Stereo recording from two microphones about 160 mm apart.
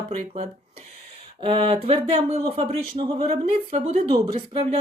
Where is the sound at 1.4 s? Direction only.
35° right (ahead or behind).